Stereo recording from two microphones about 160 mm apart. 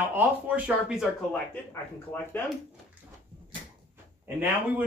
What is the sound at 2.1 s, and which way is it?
Speech, 10° left (ahead or behind).